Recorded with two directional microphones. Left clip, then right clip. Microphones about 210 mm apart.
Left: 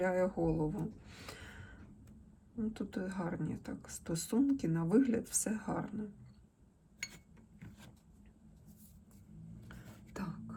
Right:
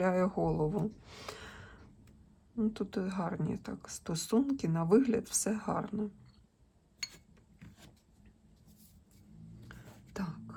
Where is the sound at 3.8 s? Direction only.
10° right (ahead or behind).